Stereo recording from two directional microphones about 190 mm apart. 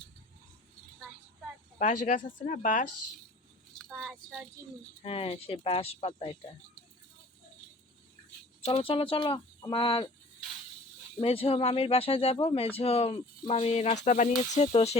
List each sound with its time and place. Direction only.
1.8 s speech: 40° left (ahead or behind)
3.8 s vehicle: centre (ahead or behind)
5.0 s speech: 30° left (ahead or behind)
8.6 s speech: 25° left (ahead or behind)
11.2 s speech: 30° left (ahead or behind)